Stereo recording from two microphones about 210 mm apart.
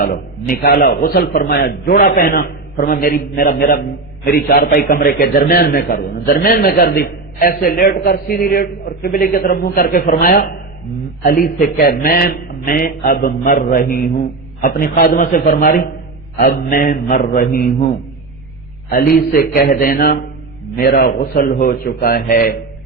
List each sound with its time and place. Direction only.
0.0 s a man's voice: 45° left (ahead or behind)
18.9 s a man's voice: 45° left (ahead or behind)